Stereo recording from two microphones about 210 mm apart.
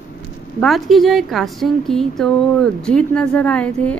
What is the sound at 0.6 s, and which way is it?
A woman's voice, centre (ahead or behind).